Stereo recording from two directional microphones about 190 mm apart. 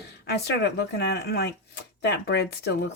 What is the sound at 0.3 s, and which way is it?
Speech, 60° left (ahead or behind).